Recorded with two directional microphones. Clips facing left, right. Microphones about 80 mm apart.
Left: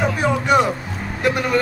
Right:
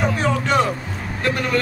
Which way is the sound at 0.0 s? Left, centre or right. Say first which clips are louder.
Left 1 dB; centre.